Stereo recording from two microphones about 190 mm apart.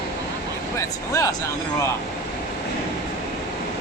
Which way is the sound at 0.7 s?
15° left (ahead or behind).